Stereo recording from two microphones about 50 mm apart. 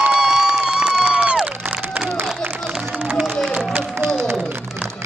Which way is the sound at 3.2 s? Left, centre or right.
Centre.